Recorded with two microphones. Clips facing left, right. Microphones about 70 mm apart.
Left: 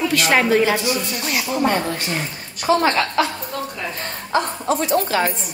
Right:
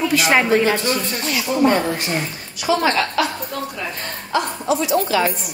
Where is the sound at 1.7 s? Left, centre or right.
Right.